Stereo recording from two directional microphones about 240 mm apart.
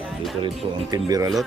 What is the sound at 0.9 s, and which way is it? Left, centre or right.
Speech, centre.